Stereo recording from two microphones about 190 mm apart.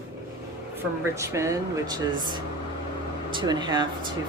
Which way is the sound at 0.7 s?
15° right (ahead or behind).